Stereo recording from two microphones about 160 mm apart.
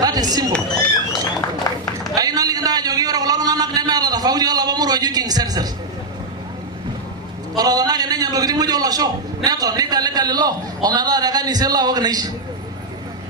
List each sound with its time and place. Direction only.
0.0 s speech: 25° right (ahead or behind)
2.1 s a sound: 25° right (ahead or behind)
7.5 s a man's voice: 25° right (ahead or behind)